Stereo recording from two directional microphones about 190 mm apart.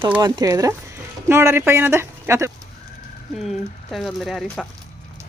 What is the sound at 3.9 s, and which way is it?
Speech, centre (ahead or behind).